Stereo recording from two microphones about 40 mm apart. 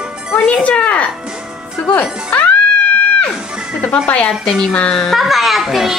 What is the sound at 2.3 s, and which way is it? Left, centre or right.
Music, left.